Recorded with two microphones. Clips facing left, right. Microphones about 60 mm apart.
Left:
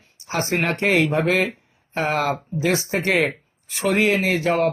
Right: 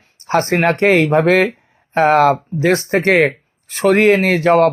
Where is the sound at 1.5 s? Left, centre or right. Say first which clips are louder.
Right 4 dB; right.